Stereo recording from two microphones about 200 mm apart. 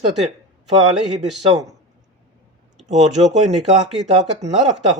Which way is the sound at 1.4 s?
35° right (ahead or behind).